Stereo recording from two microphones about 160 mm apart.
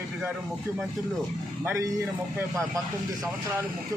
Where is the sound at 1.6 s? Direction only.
20° right (ahead or behind).